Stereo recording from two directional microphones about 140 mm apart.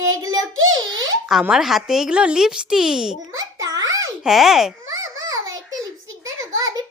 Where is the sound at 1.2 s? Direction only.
5° right (ahead or behind).